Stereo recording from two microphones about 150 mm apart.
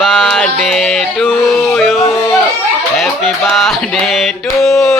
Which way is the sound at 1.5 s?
15° left (ahead or behind).